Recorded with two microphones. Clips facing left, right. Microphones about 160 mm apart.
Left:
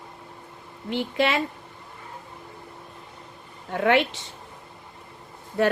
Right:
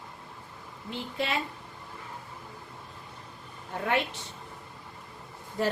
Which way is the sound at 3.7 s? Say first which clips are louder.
Left 8 dB; 90° left.